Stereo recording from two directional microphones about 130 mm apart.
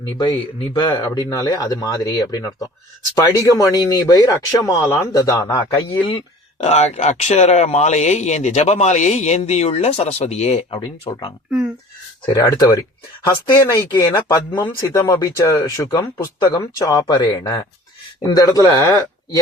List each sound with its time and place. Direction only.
0.7 s speech: 35° left (ahead or behind)
0.9 s speech: 25° left (ahead or behind)
5.9 s speech: 40° left (ahead or behind)
6.6 s speech: 60° left (ahead or behind)
10.7 s speech: 35° left (ahead or behind)
12.3 s speech: 25° left (ahead or behind)